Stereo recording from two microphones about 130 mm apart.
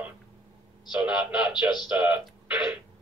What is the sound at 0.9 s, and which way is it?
A man's voice, 5° right (ahead or behind).